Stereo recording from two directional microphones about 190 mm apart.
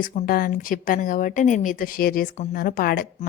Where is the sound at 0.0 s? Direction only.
50° left (ahead or behind).